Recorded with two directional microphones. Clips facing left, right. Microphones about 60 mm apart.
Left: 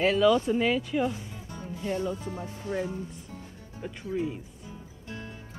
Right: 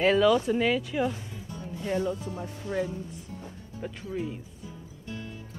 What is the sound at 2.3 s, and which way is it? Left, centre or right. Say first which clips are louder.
Speech: even; left.